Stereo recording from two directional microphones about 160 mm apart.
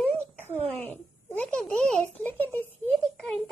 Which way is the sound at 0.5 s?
40° right (ahead or behind).